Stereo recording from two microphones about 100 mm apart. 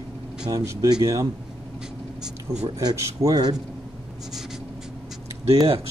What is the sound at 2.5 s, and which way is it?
Speech, 30° right (ahead or behind).